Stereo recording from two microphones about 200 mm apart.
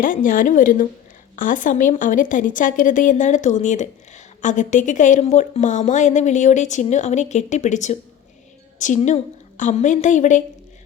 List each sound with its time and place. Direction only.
0.0 s a woman's voice: 40° left (ahead or behind)